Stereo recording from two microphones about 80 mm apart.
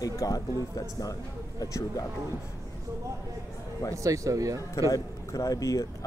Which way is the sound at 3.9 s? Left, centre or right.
Right.